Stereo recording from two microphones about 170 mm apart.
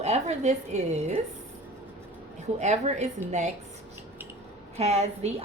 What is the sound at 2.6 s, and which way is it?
Speech, 45° right (ahead or behind).